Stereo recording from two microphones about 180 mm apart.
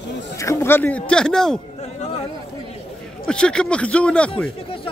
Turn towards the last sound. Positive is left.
turn(degrees=5)  # may be behind; listen again after turning